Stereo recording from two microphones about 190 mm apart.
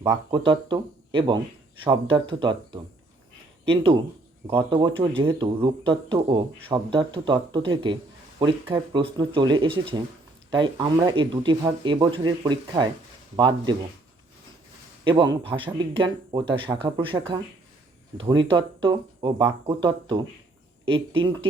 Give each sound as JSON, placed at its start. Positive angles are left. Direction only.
{"t": 0.0, "sound": "speech", "side_deg": -20}
{"t": 15.0, "sound": "speech", "side_deg": -20}